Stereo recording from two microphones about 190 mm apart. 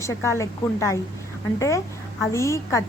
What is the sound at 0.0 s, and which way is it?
A woman's voice, 15° left (ahead or behind).